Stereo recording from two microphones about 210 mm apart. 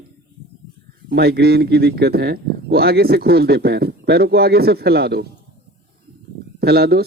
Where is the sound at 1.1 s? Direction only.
50° right (ahead or behind).